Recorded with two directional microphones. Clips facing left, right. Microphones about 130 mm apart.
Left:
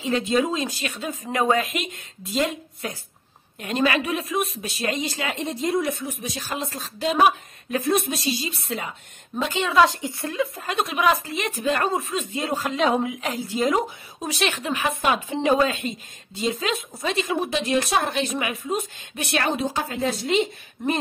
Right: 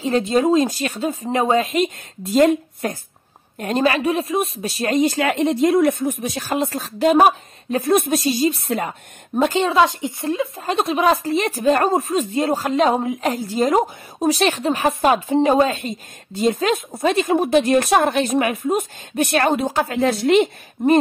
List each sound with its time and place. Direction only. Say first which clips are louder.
0.0 s a woman's voice: right 5 dB; 40° right (ahead or behind)
2.2 s speech: right 10 dB; 50° right (ahead or behind)
9.7 s a woman's voice: right 2 dB; 20° right (ahead or behind); by 20.4 s 65° right (ahead or behind)